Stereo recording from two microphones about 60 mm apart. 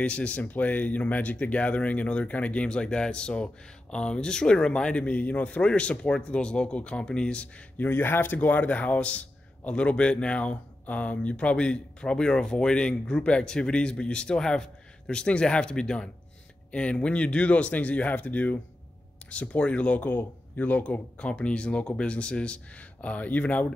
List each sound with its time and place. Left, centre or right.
0.0 s a man's voice: centre
7.7 s a man's voice: left